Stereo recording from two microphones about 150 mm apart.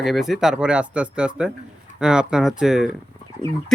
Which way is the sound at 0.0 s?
Centre (ahead or behind).